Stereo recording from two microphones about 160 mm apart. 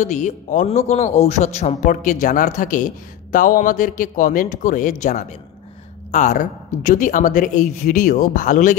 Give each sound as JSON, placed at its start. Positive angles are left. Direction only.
{"t": 0.0, "sound": "a man's voice", "side_deg": 50}